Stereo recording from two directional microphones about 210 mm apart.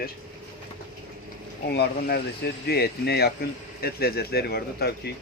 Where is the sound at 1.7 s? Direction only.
50° left (ahead or behind).